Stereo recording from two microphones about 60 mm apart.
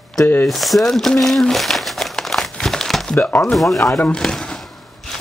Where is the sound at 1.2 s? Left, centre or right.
Centre.